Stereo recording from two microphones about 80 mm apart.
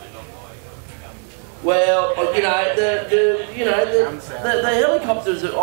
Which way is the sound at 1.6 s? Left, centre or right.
Centre.